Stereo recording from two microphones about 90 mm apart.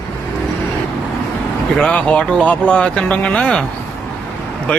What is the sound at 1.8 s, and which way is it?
Speech, 10° left (ahead or behind).